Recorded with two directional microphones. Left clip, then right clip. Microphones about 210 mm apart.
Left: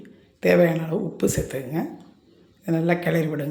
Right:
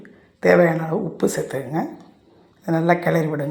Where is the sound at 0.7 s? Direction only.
5° left (ahead or behind).